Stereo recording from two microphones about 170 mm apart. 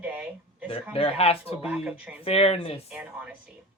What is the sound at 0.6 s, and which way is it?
Speech, 35° left (ahead or behind).